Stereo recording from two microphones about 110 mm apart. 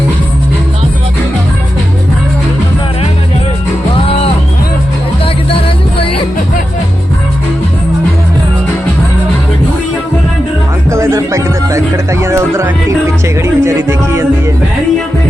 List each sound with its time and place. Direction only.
5.2 s music: 55° left (ahead or behind)
10.8 s music: 25° right (ahead or behind)